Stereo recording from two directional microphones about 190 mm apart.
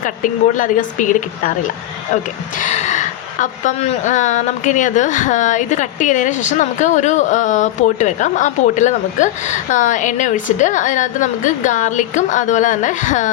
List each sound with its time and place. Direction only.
0.0 s speech: 45° left (ahead or behind)
2.6 s a woman's voice: 40° left (ahead or behind)